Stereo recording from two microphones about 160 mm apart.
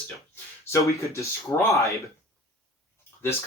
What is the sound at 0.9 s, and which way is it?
Speech, 20° left (ahead or behind).